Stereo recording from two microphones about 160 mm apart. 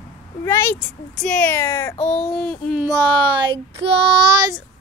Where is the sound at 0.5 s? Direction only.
15° left (ahead or behind).